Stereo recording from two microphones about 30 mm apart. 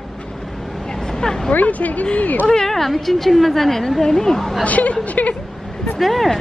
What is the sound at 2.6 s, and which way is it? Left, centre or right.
A woman's voice, centre.